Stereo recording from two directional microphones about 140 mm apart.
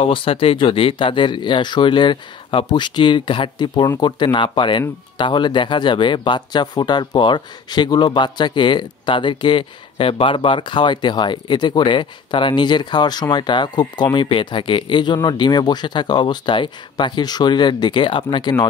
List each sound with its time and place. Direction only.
0.0 s speech: 40° left (ahead or behind)